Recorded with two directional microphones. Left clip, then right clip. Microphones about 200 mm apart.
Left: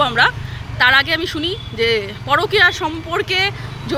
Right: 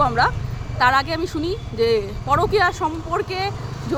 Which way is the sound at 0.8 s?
5° right (ahead or behind).